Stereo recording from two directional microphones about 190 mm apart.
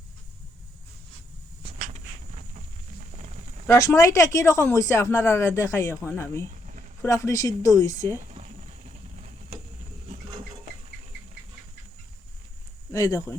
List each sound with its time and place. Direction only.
3.7 s speech: 15° left (ahead or behind)
8.2 s a sound: 40° right (ahead or behind)
12.9 s speech: 15° left (ahead or behind)